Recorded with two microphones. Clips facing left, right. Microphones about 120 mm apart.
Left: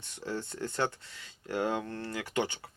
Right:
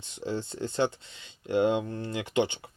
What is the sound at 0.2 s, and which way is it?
Speech, 20° right (ahead or behind).